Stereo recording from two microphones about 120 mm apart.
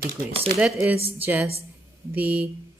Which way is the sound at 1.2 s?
15° right (ahead or behind).